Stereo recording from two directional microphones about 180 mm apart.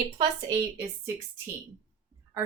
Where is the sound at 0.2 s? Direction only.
15° right (ahead or behind).